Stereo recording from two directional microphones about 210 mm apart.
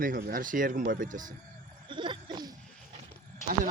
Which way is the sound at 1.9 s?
25° right (ahead or behind).